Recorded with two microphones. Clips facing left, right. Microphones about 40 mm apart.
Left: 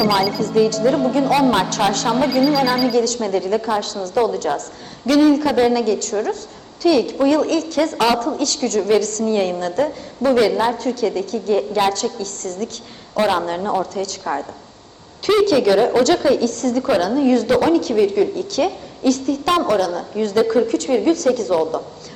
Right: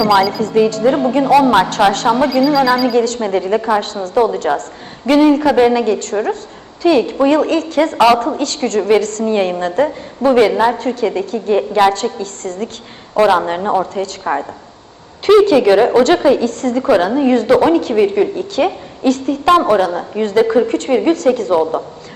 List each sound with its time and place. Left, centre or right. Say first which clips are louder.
0.3 s a woman's voice: right 3 dB; right
2.2 s speech: right 3 dB; centre
2.9 s a woman's voice: right 3 dB; right